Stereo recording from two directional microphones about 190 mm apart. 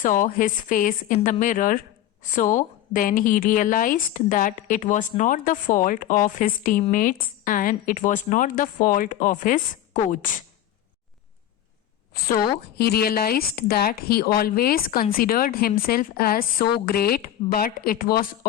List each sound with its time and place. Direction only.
0.0 s a woman's voice: 45° left (ahead or behind)
12.7 s a woman's voice: 55° left (ahead or behind)